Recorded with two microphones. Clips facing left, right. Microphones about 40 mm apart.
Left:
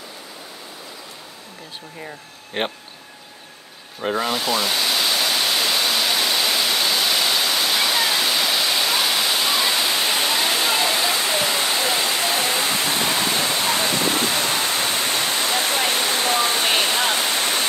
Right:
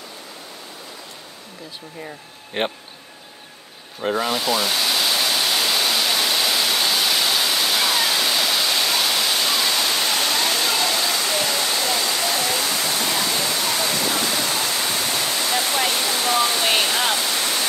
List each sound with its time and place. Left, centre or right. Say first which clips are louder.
2.6 s speech: right 1 dB; centre
4.0 s pink noise: even; centre; by 15.5 s left
15.9 s waterfall: left 1 dB; left